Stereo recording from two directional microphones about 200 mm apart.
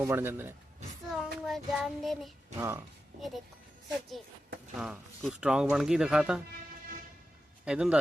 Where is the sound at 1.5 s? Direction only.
Centre (ahead or behind).